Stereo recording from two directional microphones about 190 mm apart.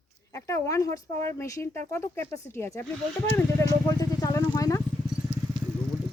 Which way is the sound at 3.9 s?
20° left (ahead or behind).